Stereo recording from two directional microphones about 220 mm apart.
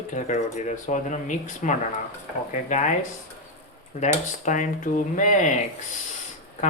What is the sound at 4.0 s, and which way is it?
Speech, 35° left (ahead or behind).